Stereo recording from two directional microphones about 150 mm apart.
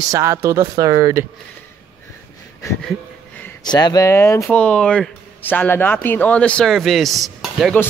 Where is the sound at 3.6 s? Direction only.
25° left (ahead or behind).